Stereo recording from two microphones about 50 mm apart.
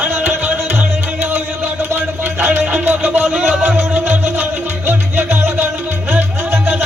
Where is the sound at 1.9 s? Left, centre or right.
Right.